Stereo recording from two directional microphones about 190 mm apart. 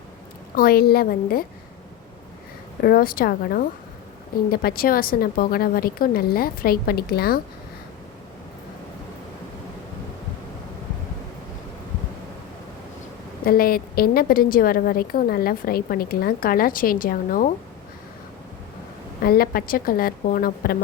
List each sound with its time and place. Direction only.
0.5 s a woman's voice: 50° left (ahead or behind)
2.8 s a woman's voice: 50° left (ahead or behind)
13.4 s a woman's voice: 50° left (ahead or behind)
19.2 s a woman's voice: 50° left (ahead or behind)